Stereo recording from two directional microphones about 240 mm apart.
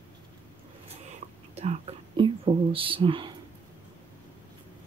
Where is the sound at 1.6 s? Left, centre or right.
Right.